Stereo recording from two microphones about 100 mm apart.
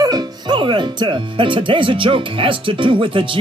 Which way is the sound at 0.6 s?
55° right (ahead or behind).